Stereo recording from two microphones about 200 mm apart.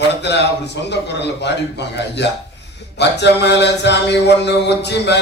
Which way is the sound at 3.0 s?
60° left (ahead or behind).